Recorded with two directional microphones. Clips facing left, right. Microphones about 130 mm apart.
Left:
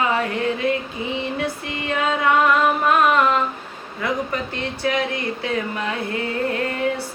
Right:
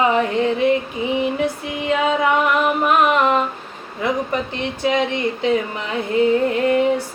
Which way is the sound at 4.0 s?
20° right (ahead or behind).